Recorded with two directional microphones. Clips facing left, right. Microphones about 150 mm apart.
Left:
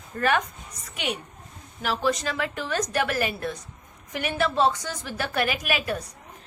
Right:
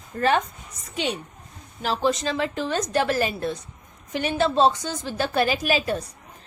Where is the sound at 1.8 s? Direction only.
30° right (ahead or behind).